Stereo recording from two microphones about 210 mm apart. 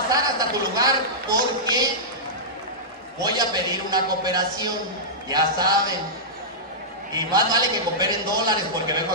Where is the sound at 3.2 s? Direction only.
20° right (ahead or behind).